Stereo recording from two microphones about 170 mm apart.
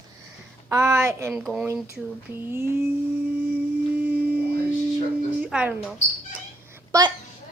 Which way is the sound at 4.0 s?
10° right (ahead or behind).